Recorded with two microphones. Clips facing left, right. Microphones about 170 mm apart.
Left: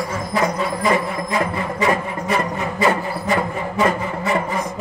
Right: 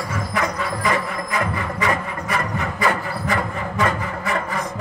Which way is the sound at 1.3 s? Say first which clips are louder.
Left 3 dB; 25° left (ahead or behind).